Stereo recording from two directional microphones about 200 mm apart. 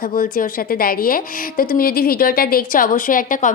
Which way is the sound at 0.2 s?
45° left (ahead or behind).